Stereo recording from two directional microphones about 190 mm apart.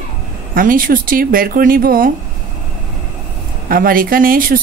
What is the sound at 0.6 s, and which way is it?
Speech, 45° right (ahead or behind).